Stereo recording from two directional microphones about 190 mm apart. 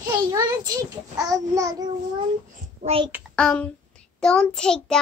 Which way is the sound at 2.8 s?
30° right (ahead or behind).